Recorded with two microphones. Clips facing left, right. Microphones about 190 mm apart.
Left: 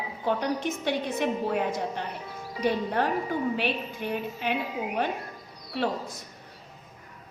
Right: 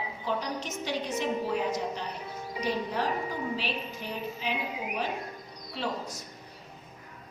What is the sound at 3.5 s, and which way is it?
A woman's voice, 60° left (ahead or behind).